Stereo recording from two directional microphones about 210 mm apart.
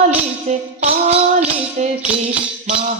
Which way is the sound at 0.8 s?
30° right (ahead or behind).